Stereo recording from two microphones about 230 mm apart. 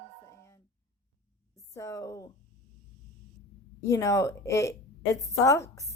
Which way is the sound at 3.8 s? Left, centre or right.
Centre.